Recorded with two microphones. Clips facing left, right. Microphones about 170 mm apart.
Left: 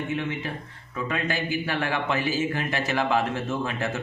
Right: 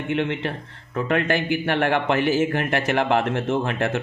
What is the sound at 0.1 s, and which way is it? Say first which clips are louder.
A man's voice: right 5 dB; 70° right (ahead or behind).